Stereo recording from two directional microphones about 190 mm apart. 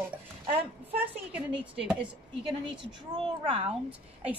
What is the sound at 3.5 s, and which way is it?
Speech, 30° right (ahead or behind).